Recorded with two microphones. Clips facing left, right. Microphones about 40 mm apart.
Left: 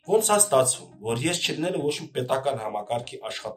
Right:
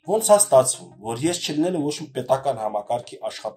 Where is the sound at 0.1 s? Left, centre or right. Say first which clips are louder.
Right 5 dB; left.